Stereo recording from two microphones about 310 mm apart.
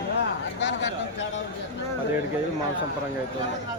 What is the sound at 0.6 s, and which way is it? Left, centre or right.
Speech, left.